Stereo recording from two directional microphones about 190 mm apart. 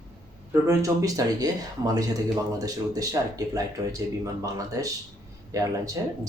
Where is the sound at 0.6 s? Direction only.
15° right (ahead or behind).